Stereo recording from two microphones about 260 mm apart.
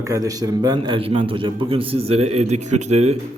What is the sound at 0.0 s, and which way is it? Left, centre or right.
A man's voice, centre.